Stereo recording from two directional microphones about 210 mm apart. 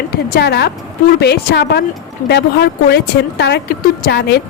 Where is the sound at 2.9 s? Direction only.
55° left (ahead or behind).